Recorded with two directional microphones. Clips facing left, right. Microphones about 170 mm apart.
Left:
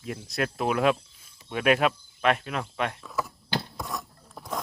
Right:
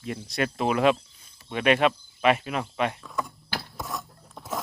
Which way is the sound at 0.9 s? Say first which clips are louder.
Right 3 dB; 10° left (ahead or behind).